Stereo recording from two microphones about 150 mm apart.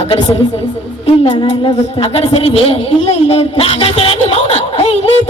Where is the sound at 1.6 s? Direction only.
40° left (ahead or behind).